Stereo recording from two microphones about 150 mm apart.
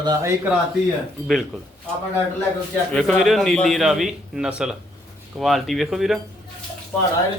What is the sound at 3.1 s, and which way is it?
A man's voice, centre (ahead or behind).